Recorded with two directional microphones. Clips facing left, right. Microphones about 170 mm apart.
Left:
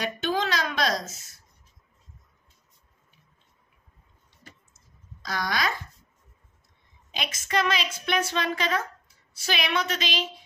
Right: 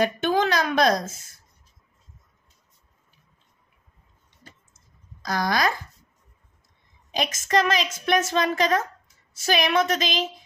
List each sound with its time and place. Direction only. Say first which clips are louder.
0.0 s a sound: right 6 dB; 50° right (ahead or behind)
5.2 s a woman's voice: right 5 dB; 45° right (ahead or behind)
7.1 s a woman's voice: right 6 dB; 45° right (ahead or behind)